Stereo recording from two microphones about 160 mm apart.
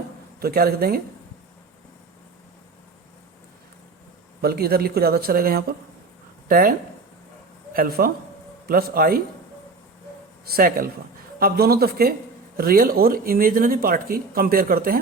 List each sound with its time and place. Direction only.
0.3 s speech: 70° right (ahead or behind)
4.4 s speech: 75° right (ahead or behind)
10.4 s speech: 65° right (ahead or behind)